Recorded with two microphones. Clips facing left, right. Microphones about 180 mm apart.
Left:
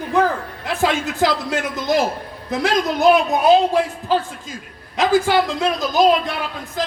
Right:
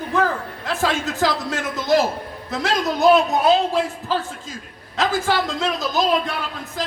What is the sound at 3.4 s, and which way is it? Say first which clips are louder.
A man's voice: left 3 dB; 15° left (ahead or behind).